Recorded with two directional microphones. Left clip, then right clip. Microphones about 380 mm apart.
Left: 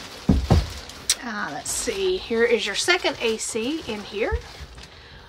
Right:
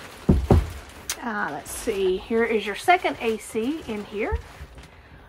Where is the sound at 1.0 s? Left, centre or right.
Centre.